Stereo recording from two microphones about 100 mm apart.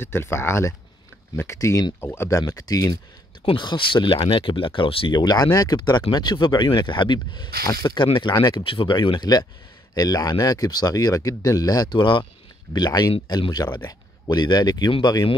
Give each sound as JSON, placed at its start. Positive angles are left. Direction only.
{"t": 0.0, "sound": "speech", "side_deg": 25}
{"t": 2.4, "sound": "speech", "side_deg": 40}
{"t": 3.4, "sound": "speech", "side_deg": 55}
{"t": 14.9, "sound": "speech", "side_deg": 55}